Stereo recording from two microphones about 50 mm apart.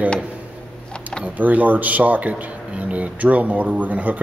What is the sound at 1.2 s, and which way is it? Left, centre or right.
Speech, right.